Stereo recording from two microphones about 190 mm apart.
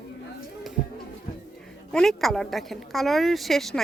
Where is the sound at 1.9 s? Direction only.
Centre (ahead or behind).